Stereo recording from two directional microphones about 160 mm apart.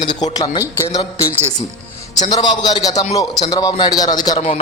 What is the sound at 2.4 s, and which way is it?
A man's voice, 25° left (ahead or behind).